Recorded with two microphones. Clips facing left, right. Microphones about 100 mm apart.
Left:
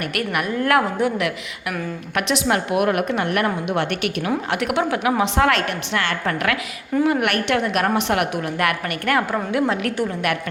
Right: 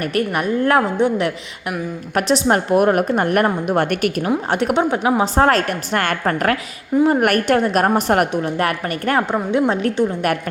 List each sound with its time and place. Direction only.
0.0 s a woman's voice: 35° right (ahead or behind)
4.4 s a woman's voice: 35° right (ahead or behind)
8.3 s a woman's voice: 30° right (ahead or behind)